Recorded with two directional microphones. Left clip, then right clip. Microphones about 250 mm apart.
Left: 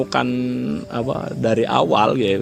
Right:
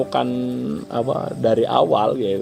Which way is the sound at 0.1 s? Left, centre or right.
Left.